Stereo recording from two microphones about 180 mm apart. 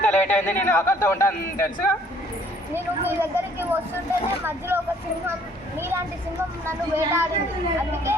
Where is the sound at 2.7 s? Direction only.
10° right (ahead or behind).